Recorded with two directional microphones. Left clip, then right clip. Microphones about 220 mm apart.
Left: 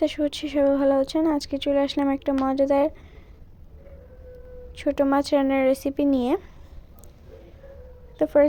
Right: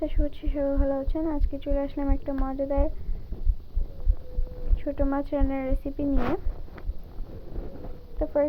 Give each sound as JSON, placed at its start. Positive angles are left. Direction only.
{"t": 0.0, "sound": "speech", "side_deg": 75}
{"t": 4.8, "sound": "speech", "side_deg": 75}
{"t": 8.2, "sound": "speech", "side_deg": 75}